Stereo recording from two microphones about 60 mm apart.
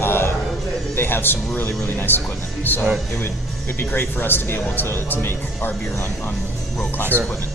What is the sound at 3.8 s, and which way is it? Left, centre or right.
Speech, left.